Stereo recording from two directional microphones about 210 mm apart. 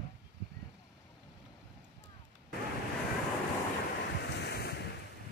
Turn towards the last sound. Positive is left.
turn(degrees=50)  # may be behind; listen again after turning